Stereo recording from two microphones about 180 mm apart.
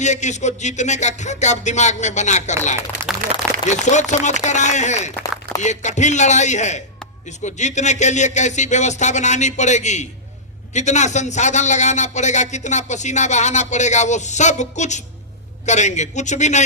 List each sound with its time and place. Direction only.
0.0 s a man's voice: 40° left (ahead or behind)
3.7 s a man's voice: 40° left (ahead or behind)